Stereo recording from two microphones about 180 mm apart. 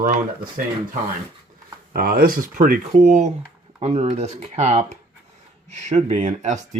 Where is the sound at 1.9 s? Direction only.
55° right (ahead or behind).